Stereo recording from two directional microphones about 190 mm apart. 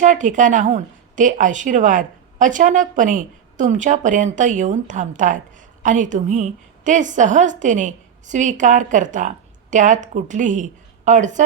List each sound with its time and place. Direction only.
0.0 s a woman's voice: 40° right (ahead or behind)